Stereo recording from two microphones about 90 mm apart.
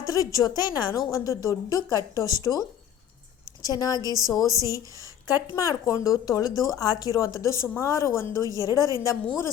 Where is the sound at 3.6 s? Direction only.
40° left (ahead or behind).